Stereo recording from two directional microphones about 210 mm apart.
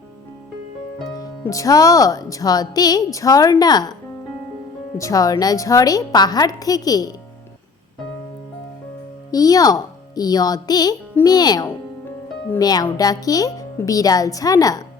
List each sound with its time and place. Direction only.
1.1 s speech: 15° left (ahead or behind)
4.9 s speech: 15° left (ahead or behind)
9.3 s speech: 15° left (ahead or behind)